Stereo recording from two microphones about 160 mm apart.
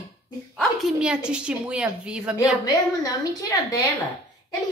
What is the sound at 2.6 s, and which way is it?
A woman's voice, 20° left (ahead or behind).